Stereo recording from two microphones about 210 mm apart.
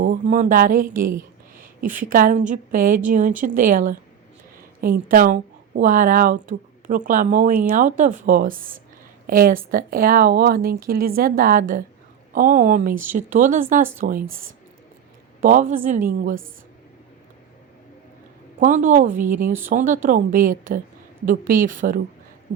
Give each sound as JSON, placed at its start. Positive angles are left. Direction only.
{"t": 0.0, "sound": "a woman's voice", "side_deg": -40}
{"t": 15.4, "sound": "a woman's voice", "side_deg": -40}
{"t": 18.6, "sound": "a woman's voice", "side_deg": -35}